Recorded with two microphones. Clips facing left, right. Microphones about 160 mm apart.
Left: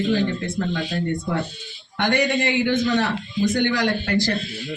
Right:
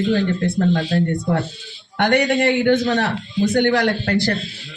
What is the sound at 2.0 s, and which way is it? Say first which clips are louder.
A man's voice: right 4 dB; 60° right (ahead or behind).